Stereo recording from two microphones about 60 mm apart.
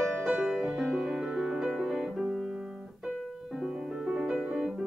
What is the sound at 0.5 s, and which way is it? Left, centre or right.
Music, centre.